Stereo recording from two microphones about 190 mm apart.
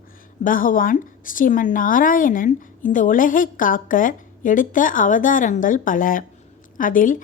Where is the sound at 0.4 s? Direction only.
45° left (ahead or behind).